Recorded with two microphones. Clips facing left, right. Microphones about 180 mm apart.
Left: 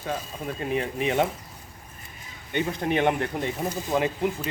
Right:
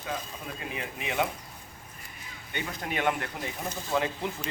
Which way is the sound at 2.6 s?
25° left (ahead or behind).